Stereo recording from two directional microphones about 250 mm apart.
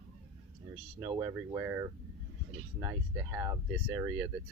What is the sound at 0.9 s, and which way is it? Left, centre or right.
Speech, centre.